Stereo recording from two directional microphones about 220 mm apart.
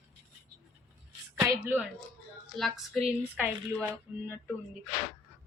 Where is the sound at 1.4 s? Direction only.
10° right (ahead or behind).